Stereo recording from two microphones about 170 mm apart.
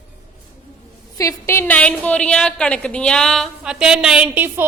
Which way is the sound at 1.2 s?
15° left (ahead or behind).